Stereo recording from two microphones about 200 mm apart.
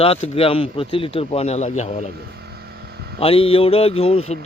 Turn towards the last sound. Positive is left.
turn(degrees=30)  # may be behind; listen again after turning